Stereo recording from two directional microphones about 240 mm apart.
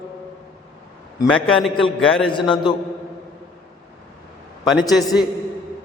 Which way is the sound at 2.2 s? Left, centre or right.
Left.